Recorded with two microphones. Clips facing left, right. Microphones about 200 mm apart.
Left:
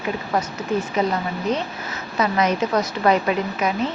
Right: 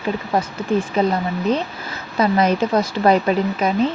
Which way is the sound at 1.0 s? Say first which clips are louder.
Right 3 dB; 30° right (ahead or behind).